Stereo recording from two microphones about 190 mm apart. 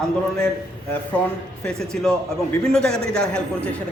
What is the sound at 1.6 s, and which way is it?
Speech, 5° left (ahead or behind).